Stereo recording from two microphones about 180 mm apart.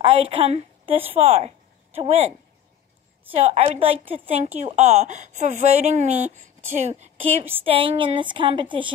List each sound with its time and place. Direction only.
0.0 s a woman's voice: 35° right (ahead or behind)
3.3 s speech: 35° right (ahead or behind)